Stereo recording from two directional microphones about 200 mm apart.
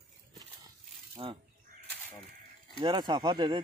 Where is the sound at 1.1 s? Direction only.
25° right (ahead or behind).